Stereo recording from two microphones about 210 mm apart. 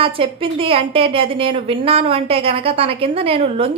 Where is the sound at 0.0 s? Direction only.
25° right (ahead or behind).